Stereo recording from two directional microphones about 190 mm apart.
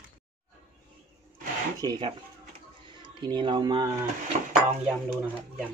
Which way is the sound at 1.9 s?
25° right (ahead or behind).